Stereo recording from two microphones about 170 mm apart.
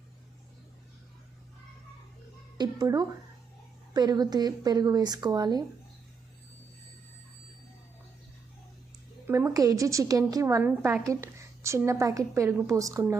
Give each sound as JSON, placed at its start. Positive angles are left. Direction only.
{"t": 2.6, "sound": "a woman's voice", "side_deg": -20}
{"t": 9.2, "sound": "a woman's voice", "side_deg": -15}